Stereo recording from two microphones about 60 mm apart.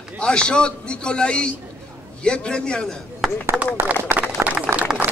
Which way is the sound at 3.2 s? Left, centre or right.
Centre.